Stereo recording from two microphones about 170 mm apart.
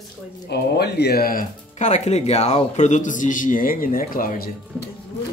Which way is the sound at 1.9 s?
40° left (ahead or behind).